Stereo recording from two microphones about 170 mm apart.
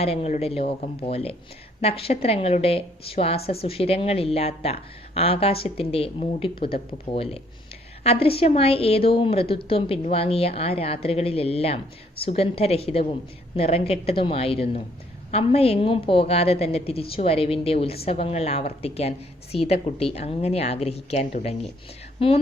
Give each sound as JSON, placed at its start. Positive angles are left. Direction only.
{"t": 0.0, "sound": "a woman's voice", "side_deg": 35}